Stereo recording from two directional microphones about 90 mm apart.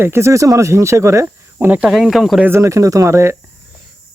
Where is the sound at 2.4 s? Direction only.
30° right (ahead or behind).